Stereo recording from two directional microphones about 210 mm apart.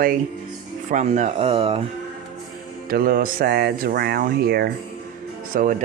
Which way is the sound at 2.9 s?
45° right (ahead or behind).